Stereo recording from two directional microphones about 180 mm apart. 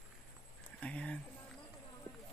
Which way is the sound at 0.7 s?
5° left (ahead or behind).